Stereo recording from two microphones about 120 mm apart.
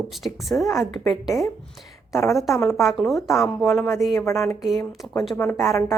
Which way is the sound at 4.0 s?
Centre (ahead or behind).